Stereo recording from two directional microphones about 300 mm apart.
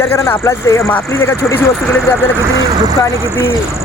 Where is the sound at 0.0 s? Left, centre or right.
Centre.